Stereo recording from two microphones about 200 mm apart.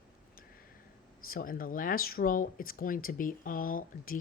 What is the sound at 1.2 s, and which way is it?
Speech, 45° left (ahead or behind).